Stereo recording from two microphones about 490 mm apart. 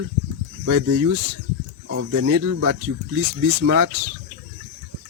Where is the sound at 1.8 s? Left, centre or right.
Right.